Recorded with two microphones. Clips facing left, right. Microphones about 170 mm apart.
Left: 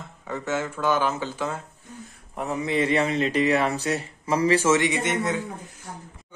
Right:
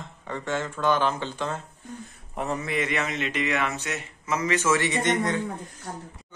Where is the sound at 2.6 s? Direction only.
30° left (ahead or behind).